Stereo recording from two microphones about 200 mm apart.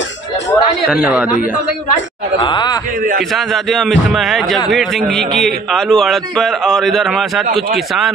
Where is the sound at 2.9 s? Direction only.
45° right (ahead or behind).